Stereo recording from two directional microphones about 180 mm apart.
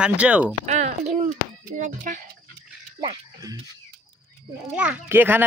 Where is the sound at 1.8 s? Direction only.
45° right (ahead or behind).